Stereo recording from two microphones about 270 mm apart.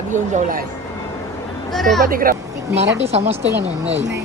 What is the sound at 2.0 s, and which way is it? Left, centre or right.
Speech, right.